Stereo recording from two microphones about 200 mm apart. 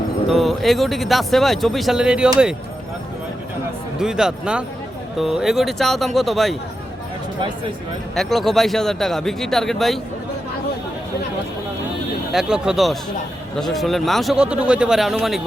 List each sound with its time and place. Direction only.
0.3 s speech: centre (ahead or behind)
3.9 s speech: 5° right (ahead or behind)
8.1 s speech: centre (ahead or behind)
12.3 s speech: centre (ahead or behind)